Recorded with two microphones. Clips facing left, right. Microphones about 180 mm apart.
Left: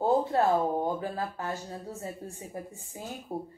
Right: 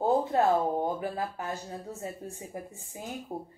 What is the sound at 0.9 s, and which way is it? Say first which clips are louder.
Speech: even; 15° right (ahead or behind).